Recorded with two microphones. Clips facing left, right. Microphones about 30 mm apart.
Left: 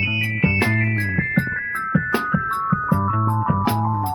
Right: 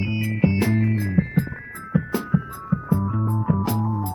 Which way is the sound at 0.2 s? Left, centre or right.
Left.